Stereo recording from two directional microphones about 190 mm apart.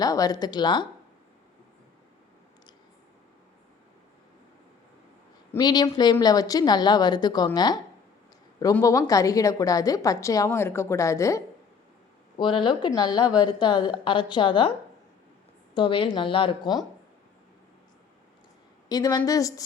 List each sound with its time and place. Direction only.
0.0 s a woman's voice: 20° left (ahead or behind)
5.5 s a woman's voice: 20° left (ahead or behind)
15.7 s a woman's voice: 25° left (ahead or behind)
18.9 s a woman's voice: 20° left (ahead or behind)